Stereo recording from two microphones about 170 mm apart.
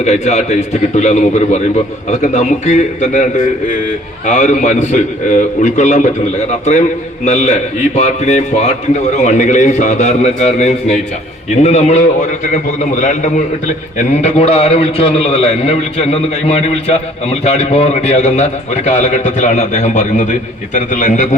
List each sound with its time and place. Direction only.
0.0 s a man's voice: 40° left (ahead or behind)
4.3 s a man's voice: 45° left (ahead or behind)